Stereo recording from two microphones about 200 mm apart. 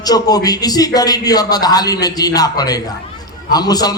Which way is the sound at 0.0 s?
20° left (ahead or behind).